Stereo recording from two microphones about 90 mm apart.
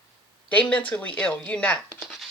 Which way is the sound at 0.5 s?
15° left (ahead or behind).